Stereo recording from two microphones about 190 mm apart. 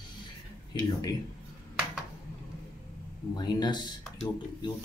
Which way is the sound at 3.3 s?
20° left (ahead or behind).